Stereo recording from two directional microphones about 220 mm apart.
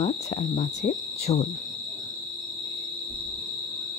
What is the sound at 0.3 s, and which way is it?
Speech, 30° left (ahead or behind).